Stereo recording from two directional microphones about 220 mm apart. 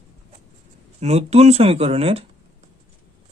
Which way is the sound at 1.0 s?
30° right (ahead or behind).